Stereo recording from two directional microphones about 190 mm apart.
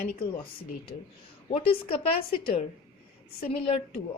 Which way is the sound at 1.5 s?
30° left (ahead or behind).